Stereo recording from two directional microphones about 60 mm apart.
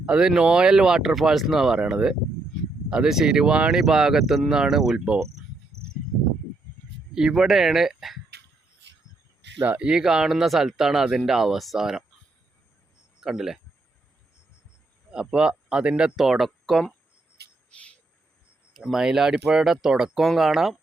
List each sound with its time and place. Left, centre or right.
0.0 s speech: centre
5.7 s insect: left
7.1 s speech: centre
9.6 s speech: right
9.9 s speech: centre
13.1 s speech: centre
15.1 s speech: centre
16.1 s speech: centre
17.7 s insect: centre
18.9 s speech: centre
20.2 s speech: centre